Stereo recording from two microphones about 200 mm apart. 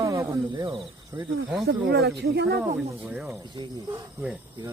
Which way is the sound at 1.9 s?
55° right (ahead or behind).